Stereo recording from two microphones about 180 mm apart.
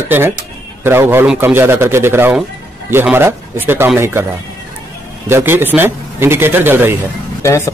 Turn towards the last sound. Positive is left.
turn(degrees=15)  # may be behind; listen again after turning